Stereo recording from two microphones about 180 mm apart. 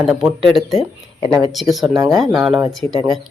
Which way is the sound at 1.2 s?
20° right (ahead or behind).